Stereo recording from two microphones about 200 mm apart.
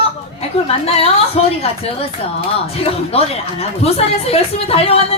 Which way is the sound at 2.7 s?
30° left (ahead or behind).